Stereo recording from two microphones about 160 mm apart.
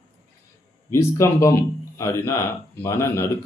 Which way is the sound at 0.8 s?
20° left (ahead or behind).